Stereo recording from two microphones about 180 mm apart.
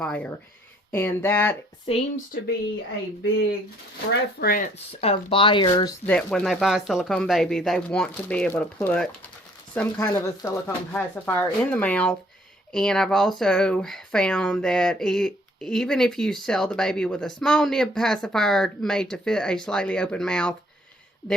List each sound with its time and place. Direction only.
0.0 s speech: 5° left (ahead or behind)
1.9 s speech: 35° left (ahead or behind)
4.1 s speech: 60° left (ahead or behind)
4.9 s speech: 35° left (ahead or behind)
6.1 s speech: 5° left (ahead or behind)